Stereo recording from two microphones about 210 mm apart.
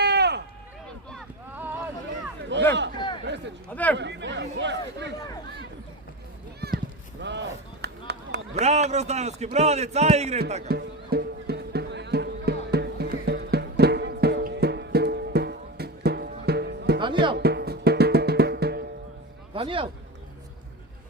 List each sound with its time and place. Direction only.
0.0 s run: 50° right (ahead or behind)
2.5 s a sound: 60° right (ahead or behind)
3.2 s speech: 55° right (ahead or behind)
3.7 s speech: 5° left (ahead or behind)
3.9 s speech: 55° right (ahead or behind)
7.2 s a sound: 55° right (ahead or behind)
8.5 s a man's voice: 30° right (ahead or behind)
10.7 s music: 50° right (ahead or behind)
17.0 s music: 25° right (ahead or behind)
17.3 s music: 50° right (ahead or behind)
19.5 s speech: 25° right (ahead or behind)